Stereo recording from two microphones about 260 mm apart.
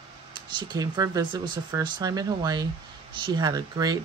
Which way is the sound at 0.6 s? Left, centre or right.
Centre.